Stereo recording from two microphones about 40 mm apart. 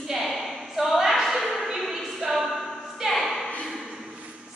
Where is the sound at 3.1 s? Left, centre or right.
Centre.